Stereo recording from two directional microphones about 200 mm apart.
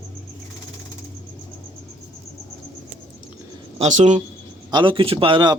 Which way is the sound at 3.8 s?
35° right (ahead or behind).